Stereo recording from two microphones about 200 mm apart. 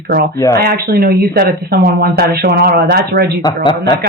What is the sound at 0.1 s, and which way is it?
Speech, 45° right (ahead or behind).